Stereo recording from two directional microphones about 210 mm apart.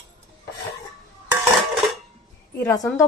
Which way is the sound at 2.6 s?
10° left (ahead or behind).